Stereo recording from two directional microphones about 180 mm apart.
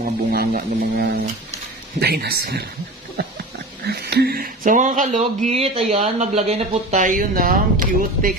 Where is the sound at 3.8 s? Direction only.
60° right (ahead or behind).